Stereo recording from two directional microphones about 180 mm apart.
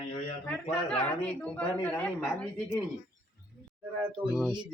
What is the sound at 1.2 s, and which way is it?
A woman's voice, 10° left (ahead or behind).